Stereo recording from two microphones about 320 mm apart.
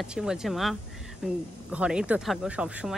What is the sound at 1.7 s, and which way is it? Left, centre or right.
A woman's voice, centre.